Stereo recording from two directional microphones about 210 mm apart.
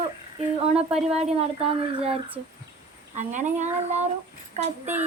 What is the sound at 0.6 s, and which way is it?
Speech, 30° right (ahead or behind).